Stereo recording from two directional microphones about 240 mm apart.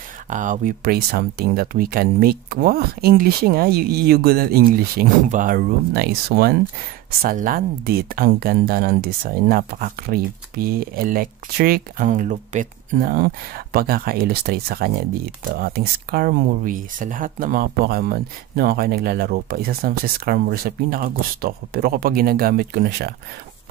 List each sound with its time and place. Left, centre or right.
0.3 s speech: right